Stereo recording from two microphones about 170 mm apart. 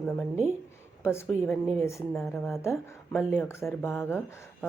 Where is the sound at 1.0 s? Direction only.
15° left (ahead or behind).